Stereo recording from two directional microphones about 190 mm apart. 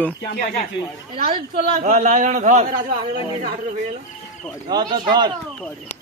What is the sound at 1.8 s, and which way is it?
Speech, 45° right (ahead or behind).